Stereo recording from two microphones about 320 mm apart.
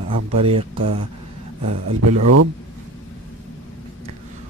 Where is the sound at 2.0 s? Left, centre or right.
Right.